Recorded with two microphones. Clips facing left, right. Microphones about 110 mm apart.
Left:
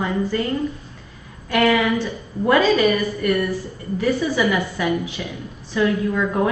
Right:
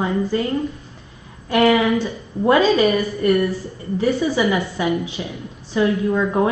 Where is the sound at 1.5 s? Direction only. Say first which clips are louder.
Right 2 dB; 25° right (ahead or behind).